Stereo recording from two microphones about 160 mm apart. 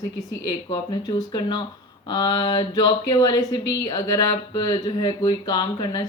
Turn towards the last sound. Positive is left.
turn(degrees=25)  # may be behind; listen again after turning